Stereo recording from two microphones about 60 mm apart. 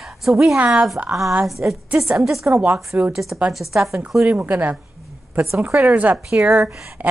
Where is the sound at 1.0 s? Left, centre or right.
Right.